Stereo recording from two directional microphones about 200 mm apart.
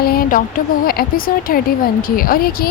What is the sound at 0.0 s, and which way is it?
A woman's voice, 50° left (ahead or behind).